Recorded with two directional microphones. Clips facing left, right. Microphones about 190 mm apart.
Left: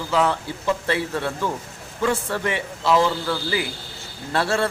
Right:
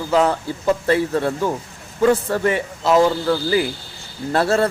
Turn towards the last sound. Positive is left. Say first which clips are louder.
# right 5 dB
turn(degrees=-40)  # may be behind; listen again after turning